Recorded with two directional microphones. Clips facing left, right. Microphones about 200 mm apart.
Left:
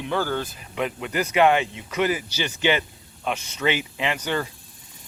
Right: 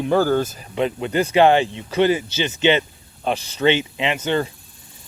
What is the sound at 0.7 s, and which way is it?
Speech, 30° right (ahead or behind).